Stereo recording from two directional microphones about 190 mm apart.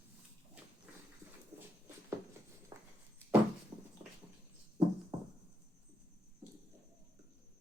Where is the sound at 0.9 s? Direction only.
5° right (ahead or behind).